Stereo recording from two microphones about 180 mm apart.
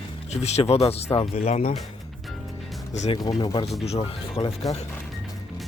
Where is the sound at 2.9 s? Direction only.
40° left (ahead or behind).